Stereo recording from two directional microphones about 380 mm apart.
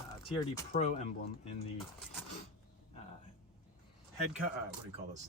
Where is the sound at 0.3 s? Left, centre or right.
Centre.